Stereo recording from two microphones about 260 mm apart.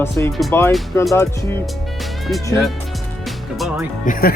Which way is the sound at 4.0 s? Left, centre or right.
Left.